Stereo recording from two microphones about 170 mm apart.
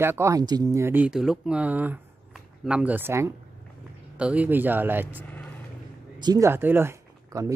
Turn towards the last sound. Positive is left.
turn(degrees=-20)  # may be behind; listen again after turning